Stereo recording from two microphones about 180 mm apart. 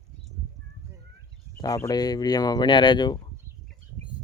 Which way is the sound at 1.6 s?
20° left (ahead or behind).